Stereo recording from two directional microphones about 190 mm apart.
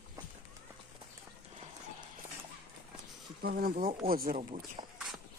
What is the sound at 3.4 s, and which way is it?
Speech, 55° right (ahead or behind).